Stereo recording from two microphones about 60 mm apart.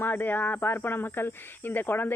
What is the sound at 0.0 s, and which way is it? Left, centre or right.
Speech, left.